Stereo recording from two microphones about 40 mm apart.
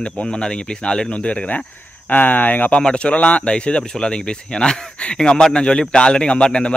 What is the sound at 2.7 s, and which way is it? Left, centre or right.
Speech, left.